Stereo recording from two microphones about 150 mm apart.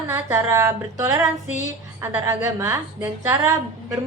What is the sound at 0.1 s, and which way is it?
A woman's voice, 15° right (ahead or behind).